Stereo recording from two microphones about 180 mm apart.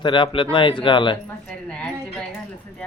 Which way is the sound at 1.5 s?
5° left (ahead or behind).